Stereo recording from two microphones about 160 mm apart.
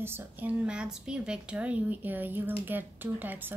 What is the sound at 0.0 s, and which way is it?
A woman's voice, 15° right (ahead or behind).